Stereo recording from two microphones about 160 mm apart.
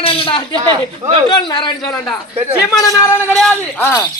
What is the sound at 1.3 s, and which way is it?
Speech, 30° left (ahead or behind).